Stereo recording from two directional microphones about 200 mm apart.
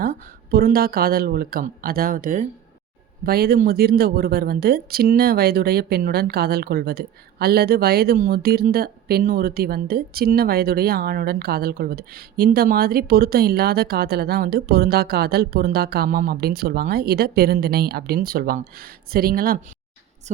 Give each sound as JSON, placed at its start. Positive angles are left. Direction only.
{"t": 0.0, "sound": "speech", "side_deg": -45}
{"t": 20.3, "sound": "a woman's voice", "side_deg": -35}